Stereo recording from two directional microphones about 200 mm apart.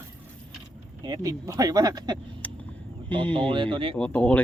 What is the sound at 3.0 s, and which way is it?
Speech, 10° left (ahead or behind).